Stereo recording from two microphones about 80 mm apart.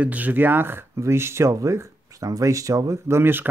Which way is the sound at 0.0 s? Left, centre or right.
Centre.